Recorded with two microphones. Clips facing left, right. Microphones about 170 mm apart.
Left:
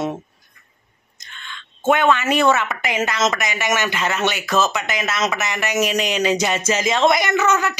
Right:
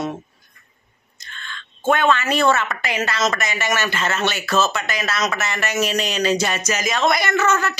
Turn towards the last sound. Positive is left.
turn(degrees=15)  # may be behind; listen again after turning